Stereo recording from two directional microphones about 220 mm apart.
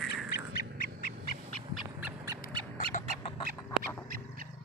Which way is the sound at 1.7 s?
10° right (ahead or behind).